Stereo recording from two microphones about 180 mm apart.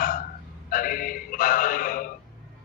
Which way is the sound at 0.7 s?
50° left (ahead or behind).